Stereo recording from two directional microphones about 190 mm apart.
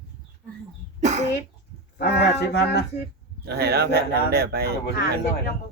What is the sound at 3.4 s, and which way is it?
Speech, 60° right (ahead or behind).